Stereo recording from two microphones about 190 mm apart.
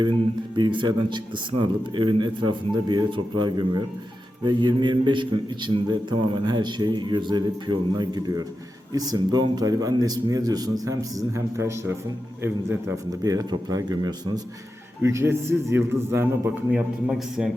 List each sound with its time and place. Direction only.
0.5 s a man's voice: 25° right (ahead or behind); by 17.5 s 5° right (ahead or behind)